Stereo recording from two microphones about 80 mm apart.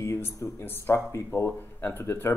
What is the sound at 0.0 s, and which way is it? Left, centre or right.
Speech, left.